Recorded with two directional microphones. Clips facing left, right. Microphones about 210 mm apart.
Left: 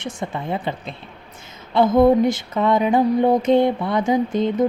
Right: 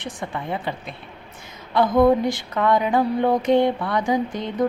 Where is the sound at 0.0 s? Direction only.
25° left (ahead or behind).